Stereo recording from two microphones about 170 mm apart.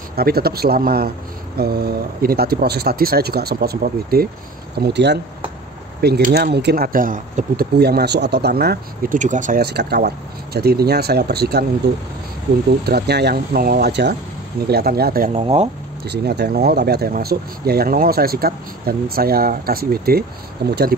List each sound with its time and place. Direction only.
0.1 s speech: 65° right (ahead or behind)
4.7 s speech: 80° right
5.9 s speech: 70° right (ahead or behind); by 9.6 s 50° right (ahead or behind)
9.6 s speech: 70° right (ahead or behind)
12.8 s speech: 70° right (ahead or behind); by 15.4 s 55° right (ahead or behind)
15.4 s speech: 40° right (ahead or behind)
16.1 s speech: 75° right (ahead or behind)